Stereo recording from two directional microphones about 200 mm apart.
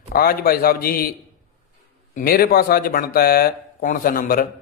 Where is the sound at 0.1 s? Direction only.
50° left (ahead or behind).